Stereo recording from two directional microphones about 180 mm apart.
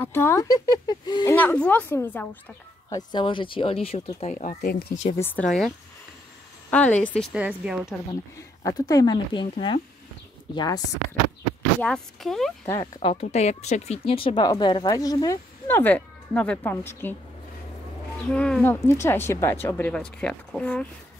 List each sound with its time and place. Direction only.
0.0 s speech: 15° left (ahead or behind)
1.3 s speech: 10° left (ahead or behind)
2.9 s speech: 25° left (ahead or behind); by 4.6 s 40° left (ahead or behind)
4.6 s speech: 60° left (ahead or behind)
5.1 s speech: 15° left (ahead or behind)
6.7 s speech: 5° left (ahead or behind)
7.3 s speech: 5° right (ahead or behind)
8.6 s speech: 20° left (ahead or behind)
11.8 s speech: 5° left (ahead or behind)
12.6 s speech: 15° left (ahead or behind)
13.0 s speech: 35° left (ahead or behind); by 17.1 s 10° left (ahead or behind)
18.3 s speech: 5° left (ahead or behind)